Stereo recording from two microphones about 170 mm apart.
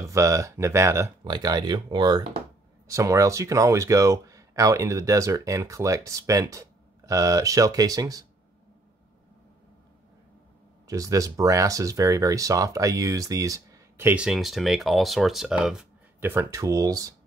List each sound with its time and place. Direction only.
0.1 s speech: 20° right (ahead or behind)
10.9 s speech: 20° right (ahead or behind); by 15.9 s 5° right (ahead or behind)
16.2 s speech: 15° right (ahead or behind)